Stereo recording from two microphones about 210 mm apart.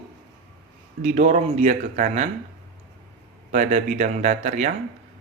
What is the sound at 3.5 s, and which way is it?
Speech, 35° right (ahead or behind).